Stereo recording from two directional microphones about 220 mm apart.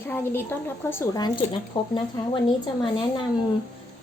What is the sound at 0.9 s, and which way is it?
Speech, 15° left (ahead or behind).